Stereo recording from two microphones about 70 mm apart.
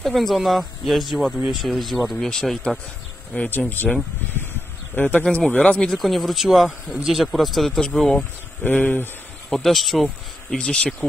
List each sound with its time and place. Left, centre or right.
0.0 s speech: centre
3.3 s speech: left
5.8 s speech: centre
8.2 s speech: left
9.5 s speech: centre
10.6 s speech: centre